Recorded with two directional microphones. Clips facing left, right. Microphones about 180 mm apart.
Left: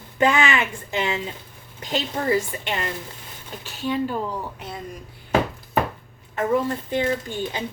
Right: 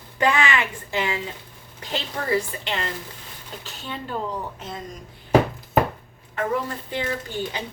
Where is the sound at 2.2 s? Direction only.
35° left (ahead or behind).